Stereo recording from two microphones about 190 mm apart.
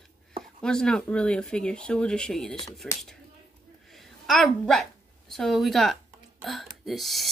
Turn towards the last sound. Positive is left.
turn(degrees=0)  # may be behind; listen again after turning